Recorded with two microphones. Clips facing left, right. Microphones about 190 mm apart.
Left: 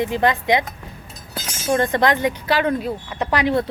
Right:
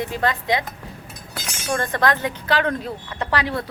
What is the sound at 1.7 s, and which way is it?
Speech, 20° left (ahead or behind).